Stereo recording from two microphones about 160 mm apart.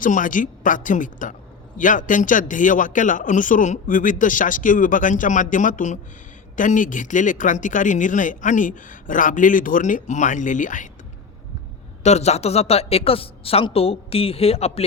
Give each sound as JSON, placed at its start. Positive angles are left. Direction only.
{"t": 0.0, "sound": "a man's voice", "side_deg": 55}
{"t": 12.0, "sound": "a woman's voice", "side_deg": 45}